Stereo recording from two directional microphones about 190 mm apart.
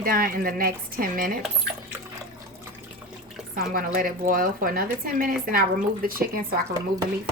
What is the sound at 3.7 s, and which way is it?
A woman's voice, 50° right (ahead or behind).